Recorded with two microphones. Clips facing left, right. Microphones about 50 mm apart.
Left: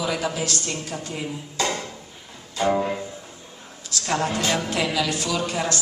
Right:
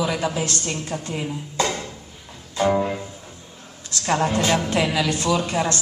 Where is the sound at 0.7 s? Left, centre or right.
Right.